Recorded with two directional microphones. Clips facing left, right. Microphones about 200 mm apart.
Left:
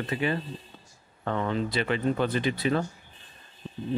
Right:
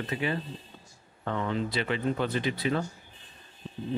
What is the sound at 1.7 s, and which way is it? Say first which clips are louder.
Speech: left 4 dB; 50° left (ahead or behind).